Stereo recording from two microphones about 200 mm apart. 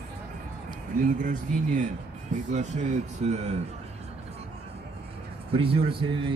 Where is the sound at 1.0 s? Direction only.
40° right (ahead or behind).